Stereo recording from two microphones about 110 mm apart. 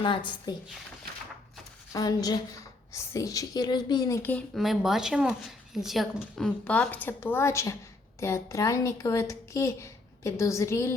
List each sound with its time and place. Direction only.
0.0 s a woman's voice: 45° left (ahead or behind)
1.9 s a woman's voice: 35° left (ahead or behind)
4.2 s speech: 15° left (ahead or behind)
4.5 s a woman's voice: centre (ahead or behind); by 10.9 s 25° left (ahead or behind)